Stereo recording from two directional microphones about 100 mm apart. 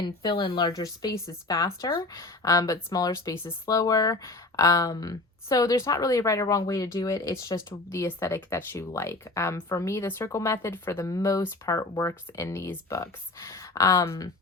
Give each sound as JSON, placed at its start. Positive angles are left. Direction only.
{"t": 0.0, "sound": "speech", "side_deg": 45}
{"t": 0.7, "sound": "speech", "side_deg": 35}
{"t": 11.1, "sound": "speech", "side_deg": 35}